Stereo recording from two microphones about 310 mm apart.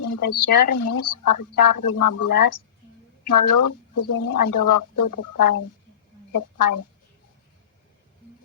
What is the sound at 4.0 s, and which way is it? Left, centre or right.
Speech, left.